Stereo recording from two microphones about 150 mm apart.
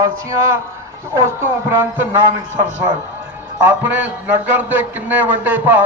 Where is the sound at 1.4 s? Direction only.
15° right (ahead or behind).